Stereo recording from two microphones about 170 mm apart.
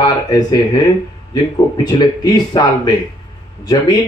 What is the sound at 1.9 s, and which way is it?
Speech, 25° left (ahead or behind).